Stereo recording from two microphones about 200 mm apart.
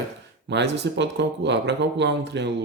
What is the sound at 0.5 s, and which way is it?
Speech, 60° right (ahead or behind).